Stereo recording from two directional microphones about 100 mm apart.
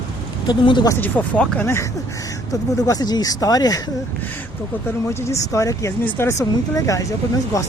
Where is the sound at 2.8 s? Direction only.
40° left (ahead or behind).